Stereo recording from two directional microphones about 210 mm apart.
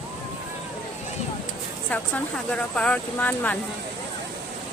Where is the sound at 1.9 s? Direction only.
5° left (ahead or behind).